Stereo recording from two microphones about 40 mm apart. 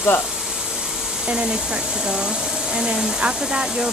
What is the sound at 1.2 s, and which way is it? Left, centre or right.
Speech, right.